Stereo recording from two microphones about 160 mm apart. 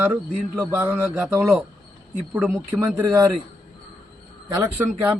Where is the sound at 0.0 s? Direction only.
10° right (ahead or behind).